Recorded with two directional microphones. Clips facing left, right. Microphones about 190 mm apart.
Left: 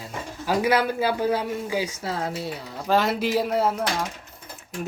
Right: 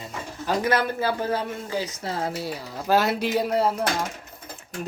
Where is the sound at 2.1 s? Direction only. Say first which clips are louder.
Even; centre (ahead or behind).